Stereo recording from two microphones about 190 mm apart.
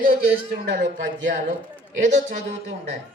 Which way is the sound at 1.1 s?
80° right.